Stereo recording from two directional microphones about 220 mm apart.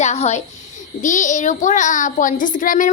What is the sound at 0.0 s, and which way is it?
Speech, 30° left (ahead or behind).